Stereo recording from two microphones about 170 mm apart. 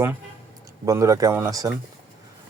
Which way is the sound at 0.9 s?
20° right (ahead or behind).